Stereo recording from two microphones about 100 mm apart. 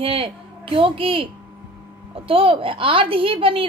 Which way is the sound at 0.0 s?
65° right (ahead or behind).